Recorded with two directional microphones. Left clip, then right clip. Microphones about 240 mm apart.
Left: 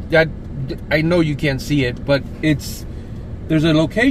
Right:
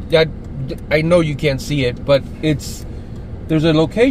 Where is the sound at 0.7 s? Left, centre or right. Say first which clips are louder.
Right 3 dB; centre.